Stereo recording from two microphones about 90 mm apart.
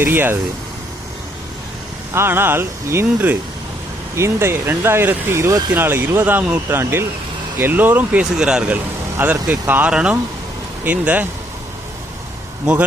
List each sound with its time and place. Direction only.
0.0 s speech: 25° right (ahead or behind)
2.1 s speech: 25° right (ahead or behind)
8.2 s speech: 10° right (ahead or behind)